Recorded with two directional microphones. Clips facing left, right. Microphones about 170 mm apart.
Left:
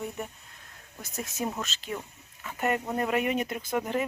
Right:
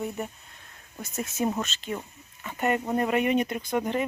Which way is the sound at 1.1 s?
Centre (ahead or behind).